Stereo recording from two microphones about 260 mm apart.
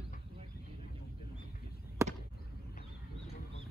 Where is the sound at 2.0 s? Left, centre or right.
Centre.